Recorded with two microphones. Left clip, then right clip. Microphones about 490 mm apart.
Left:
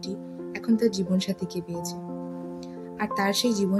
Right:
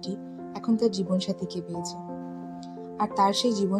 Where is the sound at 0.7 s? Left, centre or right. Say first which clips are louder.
Even; left.